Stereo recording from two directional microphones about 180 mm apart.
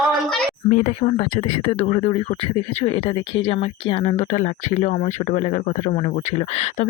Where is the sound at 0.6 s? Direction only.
45° left (ahead or behind).